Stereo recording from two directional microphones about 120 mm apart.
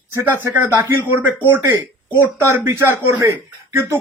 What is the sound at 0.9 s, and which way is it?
Speech, 20° right (ahead or behind).